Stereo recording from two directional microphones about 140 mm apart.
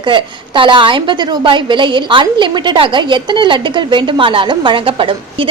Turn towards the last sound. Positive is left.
turn(degrees=-40)  # may be behind; listen again after turning